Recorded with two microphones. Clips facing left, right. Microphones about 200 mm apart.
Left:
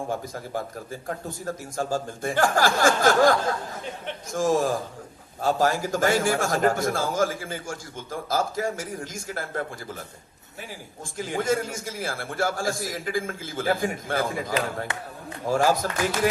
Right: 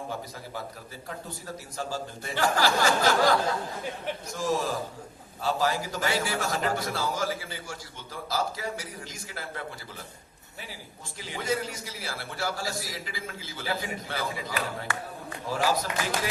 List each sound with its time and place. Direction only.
0.1 s a man's voice: 50° left (ahead or behind)
11.0 s a man's voice: 50° left (ahead or behind)
14.9 s a man's voice: 20° left (ahead or behind)
15.4 s a man's voice: 50° left (ahead or behind)